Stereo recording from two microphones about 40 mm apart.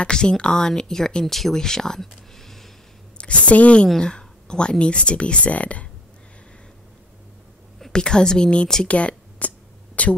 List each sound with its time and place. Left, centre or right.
0.0 s speech: centre
3.2 s a woman's voice: left
4.0 s speech: left
7.9 s speech: centre
8.8 s speech: left